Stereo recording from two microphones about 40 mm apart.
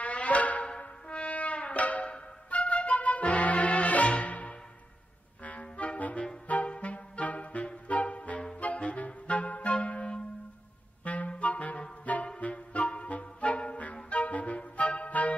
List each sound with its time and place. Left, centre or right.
0.0 s music: left
0.7 s music: left
8.5 s clarinet: left
9.8 s music: left
11.1 s clarinet: left
12.4 s music: left